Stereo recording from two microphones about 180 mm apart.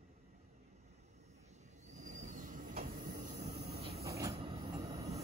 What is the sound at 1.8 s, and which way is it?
Train, 45° right (ahead or behind).